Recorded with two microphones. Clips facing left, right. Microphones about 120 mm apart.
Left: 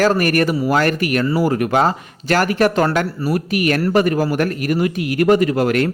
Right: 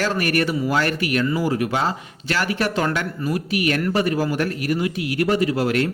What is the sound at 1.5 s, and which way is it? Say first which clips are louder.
Speech: left 5 dB; 50° left (ahead or behind).